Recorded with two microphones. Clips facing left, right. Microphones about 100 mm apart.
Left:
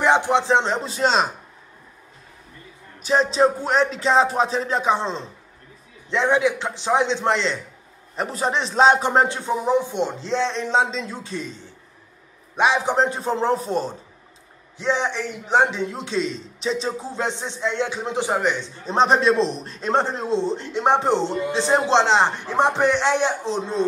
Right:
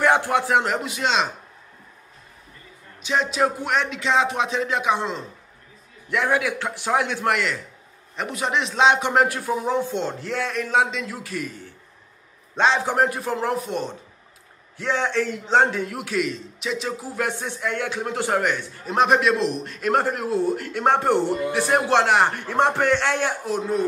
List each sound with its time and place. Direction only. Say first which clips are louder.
0.0 s a man's voice: left 1 dB; 20° left (ahead or behind); by 1.3 s 35° left (ahead or behind)
3.0 s music: left 4 dB; 35° left (ahead or behind)
6.0 s a man's voice: left 3 dB; 25° left (ahead or behind)
8.2 s music: left 1 dB; 35° left (ahead or behind)
9.7 s a man's voice: left 5 dB; 15° left (ahead or behind); by 13.9 s 35° left (ahead or behind)
14.8 s a man's voice: even; 20° left (ahead or behind)